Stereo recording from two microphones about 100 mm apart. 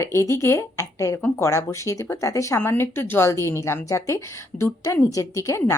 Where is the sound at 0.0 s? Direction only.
25° left (ahead or behind).